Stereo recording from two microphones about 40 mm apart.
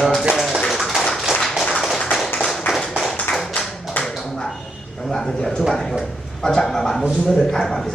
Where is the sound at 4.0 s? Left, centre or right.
Left.